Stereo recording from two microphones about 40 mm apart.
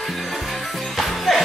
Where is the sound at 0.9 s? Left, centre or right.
Centre.